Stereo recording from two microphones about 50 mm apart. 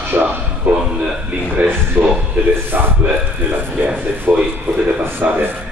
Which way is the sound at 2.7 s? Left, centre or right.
Right.